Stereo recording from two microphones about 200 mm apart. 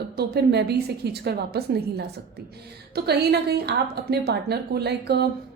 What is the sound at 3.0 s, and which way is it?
A woman's voice, 55° right (ahead or behind).